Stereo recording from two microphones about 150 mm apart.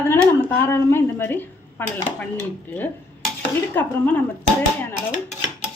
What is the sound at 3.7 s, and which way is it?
Speech, 10° left (ahead or behind).